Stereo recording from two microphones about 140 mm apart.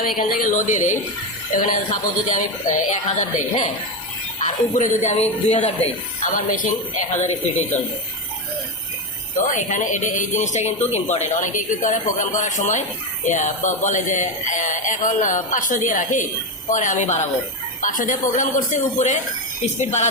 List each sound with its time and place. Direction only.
0.2 s a woman's voice: 90° left; by 0.9 s 60° left (ahead or behind)
1.5 s a woman's voice: 70° left (ahead or behind); by 7.3 s 55° left (ahead or behind)
9.5 s speech: 60° left (ahead or behind)
17.8 s speech: 70° left (ahead or behind)